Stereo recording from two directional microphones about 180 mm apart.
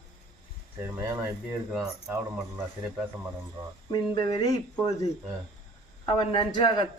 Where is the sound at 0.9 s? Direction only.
15° right (ahead or behind).